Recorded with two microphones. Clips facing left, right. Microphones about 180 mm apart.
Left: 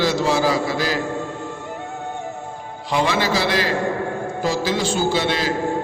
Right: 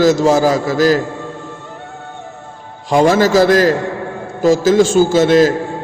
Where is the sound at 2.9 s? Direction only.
45° right (ahead or behind).